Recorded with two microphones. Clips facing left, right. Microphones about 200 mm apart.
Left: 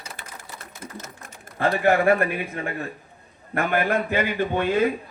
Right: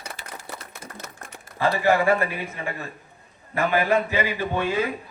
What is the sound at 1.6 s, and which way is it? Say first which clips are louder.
A man's voice: left 1 dB; 55° left (ahead or behind).